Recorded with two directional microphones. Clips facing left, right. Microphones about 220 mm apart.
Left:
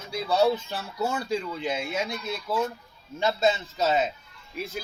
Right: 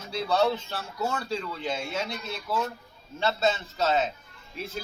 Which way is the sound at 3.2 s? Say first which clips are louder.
Left 2 dB; 15° left (ahead or behind).